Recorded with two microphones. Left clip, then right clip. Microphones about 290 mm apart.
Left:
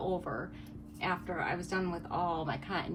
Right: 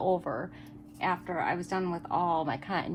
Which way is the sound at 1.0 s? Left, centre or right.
Right.